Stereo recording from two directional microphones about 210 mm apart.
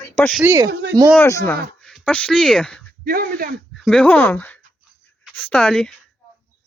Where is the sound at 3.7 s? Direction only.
5° left (ahead or behind).